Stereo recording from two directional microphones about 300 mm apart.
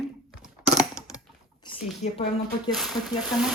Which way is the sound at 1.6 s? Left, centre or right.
Left.